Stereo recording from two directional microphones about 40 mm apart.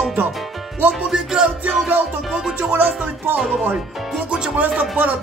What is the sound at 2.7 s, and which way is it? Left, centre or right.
Music, right.